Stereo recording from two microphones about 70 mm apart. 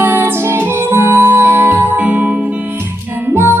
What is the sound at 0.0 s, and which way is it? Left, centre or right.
Music, right.